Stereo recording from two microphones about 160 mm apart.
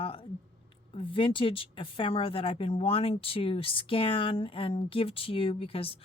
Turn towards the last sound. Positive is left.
turn(degrees=35)  # may be behind; listen again after turning